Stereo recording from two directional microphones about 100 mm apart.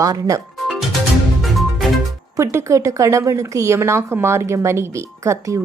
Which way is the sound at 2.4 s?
30° right (ahead or behind).